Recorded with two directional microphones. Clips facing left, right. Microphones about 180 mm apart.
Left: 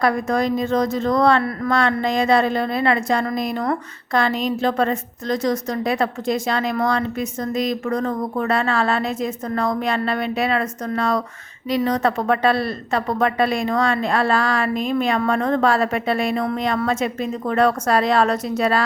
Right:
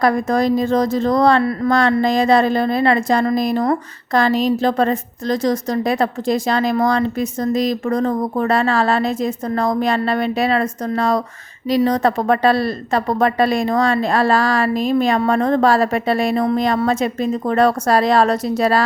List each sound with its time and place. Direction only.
0.0 s a woman's voice: 35° right (ahead or behind)